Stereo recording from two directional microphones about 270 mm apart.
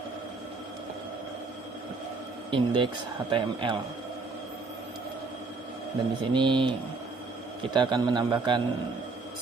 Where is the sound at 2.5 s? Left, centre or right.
Centre.